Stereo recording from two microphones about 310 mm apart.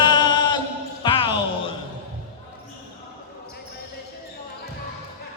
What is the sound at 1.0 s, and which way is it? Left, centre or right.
Music, centre.